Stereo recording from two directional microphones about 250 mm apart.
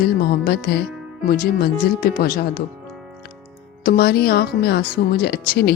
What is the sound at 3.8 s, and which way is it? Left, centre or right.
Speech, left.